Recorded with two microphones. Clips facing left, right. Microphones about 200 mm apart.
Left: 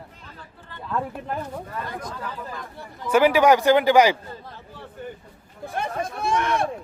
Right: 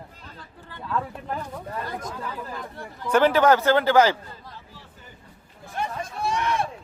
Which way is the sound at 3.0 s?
10° left (ahead or behind).